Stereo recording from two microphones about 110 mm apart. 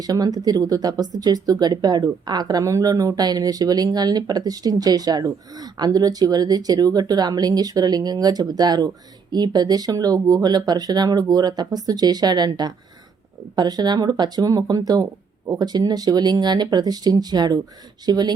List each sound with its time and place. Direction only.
0.0 s speech: 35° right (ahead or behind)